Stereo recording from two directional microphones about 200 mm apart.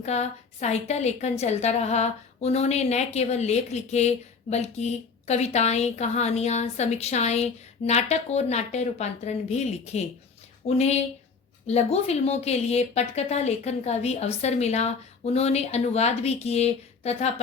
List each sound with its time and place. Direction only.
0.0 s a woman's voice: 35° left (ahead or behind)